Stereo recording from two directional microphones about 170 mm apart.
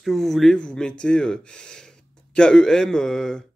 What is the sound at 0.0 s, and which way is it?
Speech, centre (ahead or behind).